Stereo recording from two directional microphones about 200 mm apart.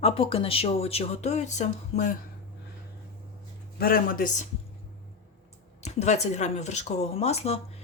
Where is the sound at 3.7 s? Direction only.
50° left (ahead or behind).